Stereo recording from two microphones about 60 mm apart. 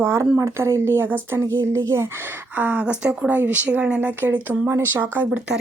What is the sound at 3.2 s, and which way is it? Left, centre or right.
Speech, right.